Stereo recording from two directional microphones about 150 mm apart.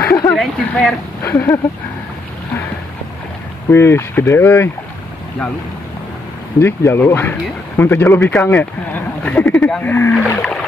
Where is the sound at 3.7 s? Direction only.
15° left (ahead or behind).